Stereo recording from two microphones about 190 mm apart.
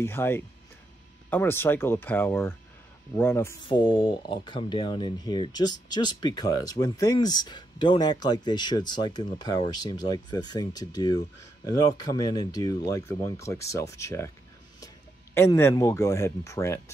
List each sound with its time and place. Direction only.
0.0 s speech: 10° left (ahead or behind)
3.6 s speech: 25° left (ahead or behind)
15.3 s speech: 15° left (ahead or behind)